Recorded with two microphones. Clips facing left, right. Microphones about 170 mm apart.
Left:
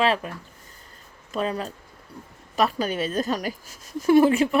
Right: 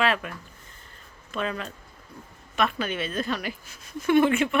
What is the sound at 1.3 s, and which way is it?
Speech, 35° left (ahead or behind).